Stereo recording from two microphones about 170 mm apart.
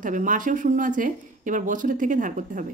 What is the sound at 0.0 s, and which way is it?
Speech, 50° right (ahead or behind).